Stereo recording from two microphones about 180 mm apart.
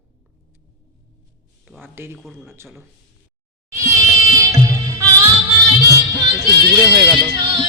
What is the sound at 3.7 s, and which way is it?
Cat, 15° right (ahead or behind).